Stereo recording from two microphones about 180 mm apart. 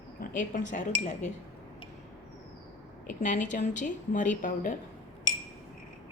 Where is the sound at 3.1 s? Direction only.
45° left (ahead or behind).